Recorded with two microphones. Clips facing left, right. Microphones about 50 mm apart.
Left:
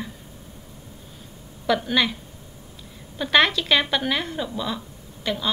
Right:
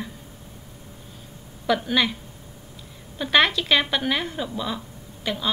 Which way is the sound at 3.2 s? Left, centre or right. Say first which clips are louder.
Left 1 dB; centre.